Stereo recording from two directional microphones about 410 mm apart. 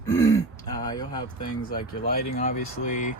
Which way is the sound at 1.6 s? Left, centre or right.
Left.